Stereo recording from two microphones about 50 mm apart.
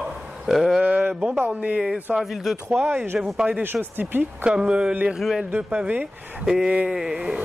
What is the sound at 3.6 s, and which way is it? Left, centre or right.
Speech, right.